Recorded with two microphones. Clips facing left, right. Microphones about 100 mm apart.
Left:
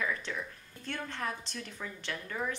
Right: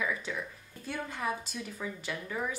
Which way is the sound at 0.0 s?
5° right (ahead or behind).